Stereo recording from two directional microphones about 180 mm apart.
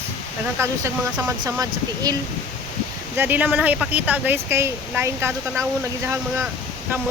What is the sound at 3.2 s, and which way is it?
Speech, 10° right (ahead or behind).